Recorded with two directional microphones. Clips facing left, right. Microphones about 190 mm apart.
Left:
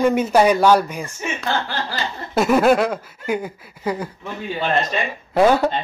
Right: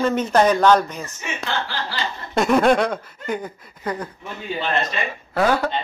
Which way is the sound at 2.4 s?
5° left (ahead or behind).